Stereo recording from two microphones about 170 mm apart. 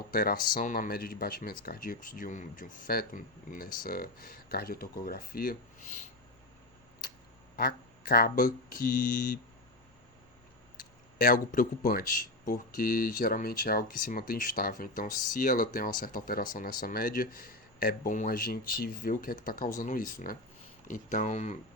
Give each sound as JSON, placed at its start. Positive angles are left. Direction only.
{"t": 0.1, "sound": "speech", "side_deg": 55}
{"t": 7.5, "sound": "speech", "side_deg": 60}
{"t": 10.8, "sound": "speech", "side_deg": 55}